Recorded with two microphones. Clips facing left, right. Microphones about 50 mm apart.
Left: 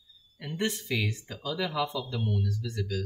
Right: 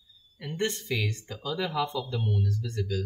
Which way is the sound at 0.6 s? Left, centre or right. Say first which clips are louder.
Right 1 dB; centre.